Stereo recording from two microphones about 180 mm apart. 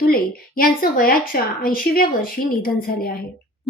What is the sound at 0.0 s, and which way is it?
A woman's voice, 55° left (ahead or behind).